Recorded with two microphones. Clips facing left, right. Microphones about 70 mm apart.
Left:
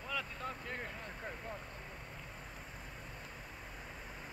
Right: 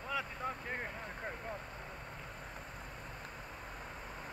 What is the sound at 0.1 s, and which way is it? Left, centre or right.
Vehicle, centre.